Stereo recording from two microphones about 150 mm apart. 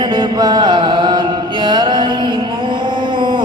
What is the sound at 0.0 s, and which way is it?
Mantra, 30° right (ahead or behind).